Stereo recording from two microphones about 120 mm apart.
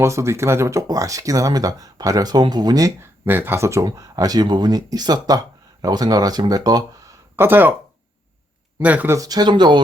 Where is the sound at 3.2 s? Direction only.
15° right (ahead or behind); by 6.8 s 35° right (ahead or behind).